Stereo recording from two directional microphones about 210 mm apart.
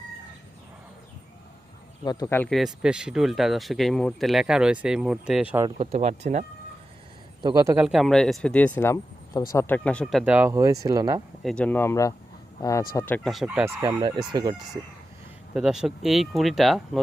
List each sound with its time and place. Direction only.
2.0 s speech: 15° left (ahead or behind); by 5.6 s 5° right (ahead or behind)
5.6 s speech: 25° right (ahead or behind)
7.4 s speech: 15° right (ahead or behind)
11.4 s speech: 5° left (ahead or behind); by 14.5 s 20° right (ahead or behind)
15.5 s speech: 5° right (ahead or behind)